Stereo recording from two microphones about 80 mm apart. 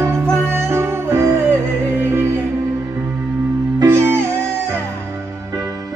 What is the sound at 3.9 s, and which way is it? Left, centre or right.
Music, right.